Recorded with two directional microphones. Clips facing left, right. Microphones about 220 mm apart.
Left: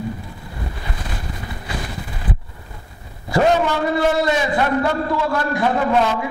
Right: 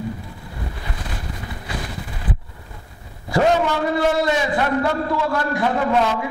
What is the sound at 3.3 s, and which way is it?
A man's voice, 20° left (ahead or behind).